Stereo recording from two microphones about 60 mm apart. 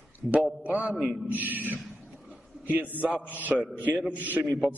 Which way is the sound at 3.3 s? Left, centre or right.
Right.